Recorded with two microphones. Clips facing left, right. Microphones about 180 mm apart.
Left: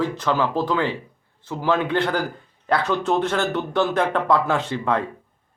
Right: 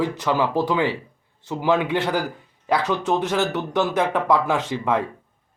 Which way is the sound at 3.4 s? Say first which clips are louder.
Even; 10° right (ahead or behind).